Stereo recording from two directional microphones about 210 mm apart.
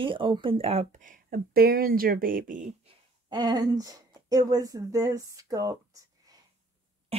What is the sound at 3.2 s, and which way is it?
Speech, 20° right (ahead or behind).